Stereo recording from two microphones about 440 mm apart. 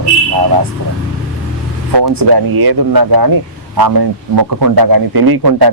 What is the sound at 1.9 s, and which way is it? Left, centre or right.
A man's voice, right.